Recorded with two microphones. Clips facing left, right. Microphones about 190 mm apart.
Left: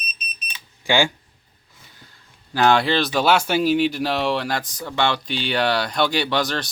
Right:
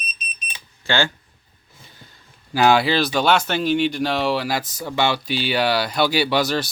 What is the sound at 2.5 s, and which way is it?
Speech, 5° right (ahead or behind).